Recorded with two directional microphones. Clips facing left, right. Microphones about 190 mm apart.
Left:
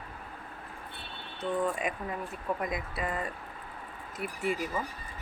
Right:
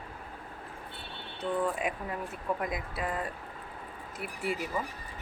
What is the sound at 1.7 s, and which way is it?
Speech, 5° right (ahead or behind).